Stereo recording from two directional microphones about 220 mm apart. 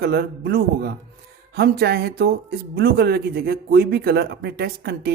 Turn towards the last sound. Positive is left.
turn(degrees=-45)  # may be behind; listen again after turning